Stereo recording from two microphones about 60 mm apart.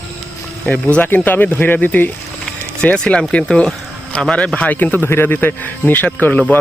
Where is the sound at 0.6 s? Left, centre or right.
Left.